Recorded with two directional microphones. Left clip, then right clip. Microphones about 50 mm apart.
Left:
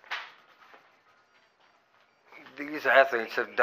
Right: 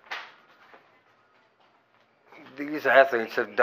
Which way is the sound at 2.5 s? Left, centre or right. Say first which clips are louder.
Right 2 dB; centre.